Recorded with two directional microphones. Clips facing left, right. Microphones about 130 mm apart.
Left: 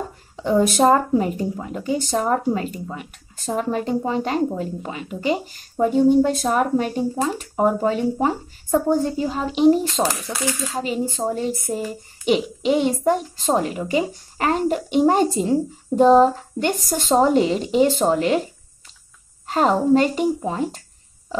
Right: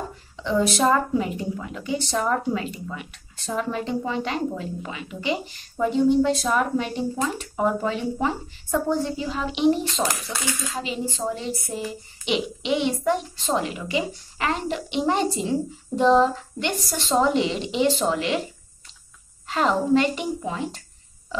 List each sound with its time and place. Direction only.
0.4 s speech: 45° left (ahead or behind)
19.4 s speech: 40° left (ahead or behind)